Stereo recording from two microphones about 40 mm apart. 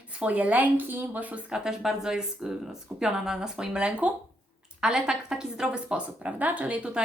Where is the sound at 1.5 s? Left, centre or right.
Centre.